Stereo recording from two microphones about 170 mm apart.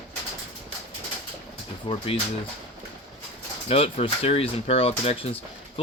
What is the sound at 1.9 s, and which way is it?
Speech, 30° left (ahead or behind).